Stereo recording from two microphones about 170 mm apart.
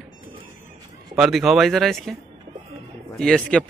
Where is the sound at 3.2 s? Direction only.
5° left (ahead or behind).